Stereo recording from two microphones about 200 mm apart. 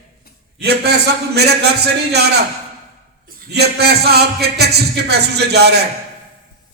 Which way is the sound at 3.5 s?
55° right (ahead or behind).